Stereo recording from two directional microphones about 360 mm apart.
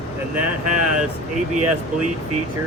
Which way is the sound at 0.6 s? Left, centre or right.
Right.